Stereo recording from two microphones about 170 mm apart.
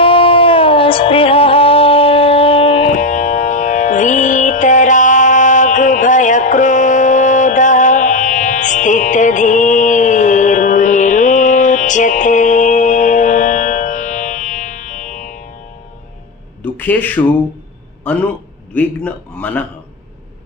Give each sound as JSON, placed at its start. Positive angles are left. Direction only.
{"t": 0.0, "sound": "music", "side_deg": 30}
{"t": 2.9, "sound": "music", "side_deg": 45}
{"t": 16.6, "sound": "a man's voice", "side_deg": 10}